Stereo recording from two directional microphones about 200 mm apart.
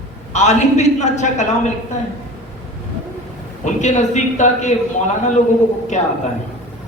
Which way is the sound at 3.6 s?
35° left (ahead or behind).